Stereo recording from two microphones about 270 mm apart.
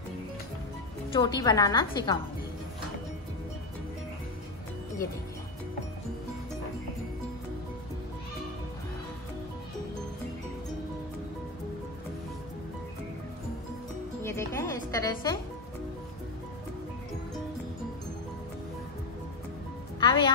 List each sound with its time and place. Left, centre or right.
1.1 s a woman's voice: centre
14.2 s music: centre
20.0 s music: centre